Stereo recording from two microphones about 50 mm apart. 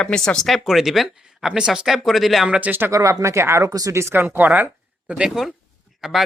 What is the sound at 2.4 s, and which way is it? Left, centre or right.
Speech, right.